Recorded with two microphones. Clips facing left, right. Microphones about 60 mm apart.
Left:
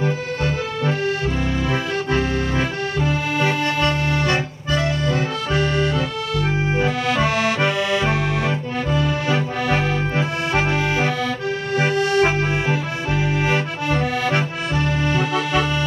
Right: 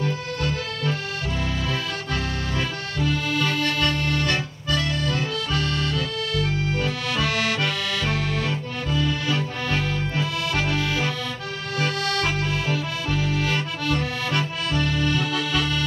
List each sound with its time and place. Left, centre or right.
0.0 s accordion: left